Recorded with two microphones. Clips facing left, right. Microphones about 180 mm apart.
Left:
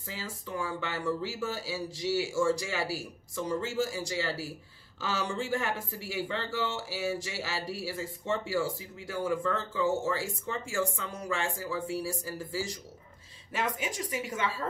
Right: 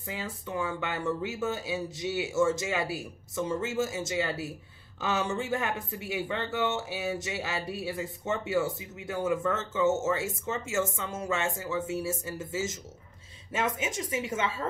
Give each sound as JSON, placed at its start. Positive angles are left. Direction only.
{"t": 0.0, "sound": "speech", "side_deg": -20}